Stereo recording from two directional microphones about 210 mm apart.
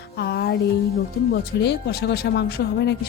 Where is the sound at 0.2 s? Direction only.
55° left (ahead or behind).